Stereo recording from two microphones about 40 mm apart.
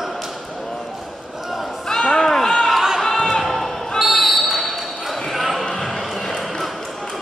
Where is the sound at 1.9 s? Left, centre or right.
Centre.